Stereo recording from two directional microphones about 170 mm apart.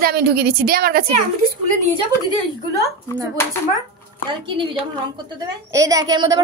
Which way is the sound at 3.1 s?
20° right (ahead or behind).